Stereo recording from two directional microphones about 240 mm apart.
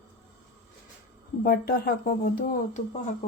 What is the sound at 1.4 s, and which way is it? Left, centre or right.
Speech, left.